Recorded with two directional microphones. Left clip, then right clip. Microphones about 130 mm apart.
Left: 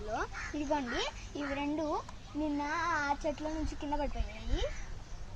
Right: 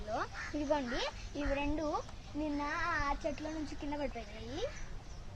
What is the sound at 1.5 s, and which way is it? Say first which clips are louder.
Speech: left 2 dB; 15° right (ahead or behind).